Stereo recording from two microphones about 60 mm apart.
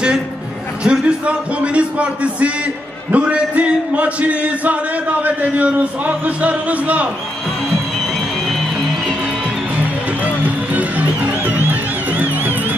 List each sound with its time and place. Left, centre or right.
0.8 s speech: centre
10.2 s music: right